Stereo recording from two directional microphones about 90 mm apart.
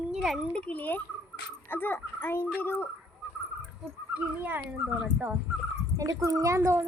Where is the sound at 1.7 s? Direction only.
25° left (ahead or behind).